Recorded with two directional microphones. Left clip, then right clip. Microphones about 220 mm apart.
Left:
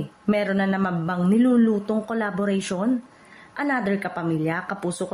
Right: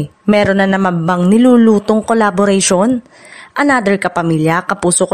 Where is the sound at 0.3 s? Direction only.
45° right (ahead or behind).